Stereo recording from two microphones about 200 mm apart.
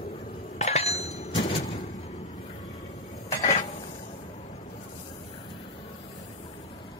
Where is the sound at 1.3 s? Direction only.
20° left (ahead or behind).